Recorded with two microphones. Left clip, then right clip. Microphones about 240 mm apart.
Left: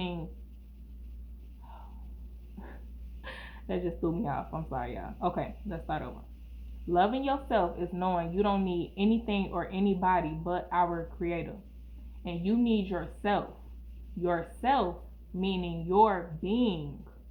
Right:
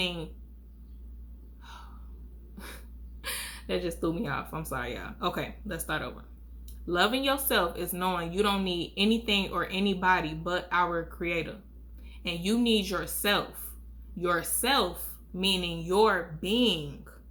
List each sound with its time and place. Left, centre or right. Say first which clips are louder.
3.2 s speech: right 7 dB; right
14.6 s speech: left 1 dB; right